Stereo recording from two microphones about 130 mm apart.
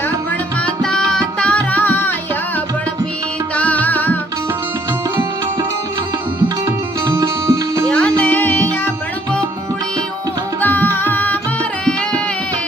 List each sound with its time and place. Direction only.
0.6 s music: 5° left (ahead or behind)
3.5 s music: 10° left (ahead or behind)
6.7 s music: 25° right (ahead or behind)
7.9 s music: 10° left (ahead or behind)
10.6 s music: 15° left (ahead or behind)